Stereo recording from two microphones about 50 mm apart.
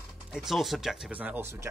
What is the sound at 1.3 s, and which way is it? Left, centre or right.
Speech, right.